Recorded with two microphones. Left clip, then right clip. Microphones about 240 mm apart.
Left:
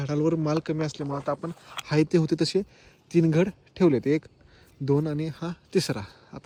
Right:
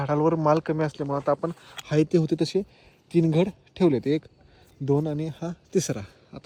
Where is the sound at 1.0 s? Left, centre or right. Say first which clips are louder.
Right 5 dB; right.